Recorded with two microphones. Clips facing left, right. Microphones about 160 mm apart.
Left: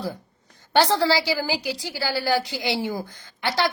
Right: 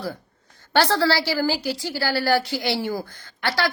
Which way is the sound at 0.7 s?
20° left (ahead or behind).